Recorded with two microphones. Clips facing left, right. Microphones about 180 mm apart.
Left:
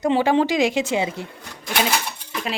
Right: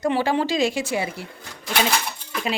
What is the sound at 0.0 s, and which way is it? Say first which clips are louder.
A woman's voice: left 3 dB; 20° left (ahead or behind).